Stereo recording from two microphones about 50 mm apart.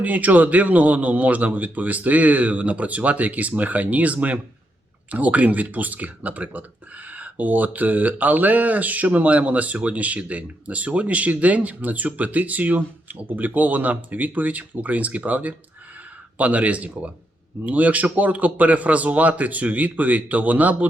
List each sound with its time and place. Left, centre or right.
0.0 s speech: right